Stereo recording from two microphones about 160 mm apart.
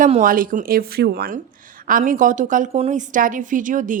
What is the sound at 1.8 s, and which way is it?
A woman's voice, 55° right (ahead or behind).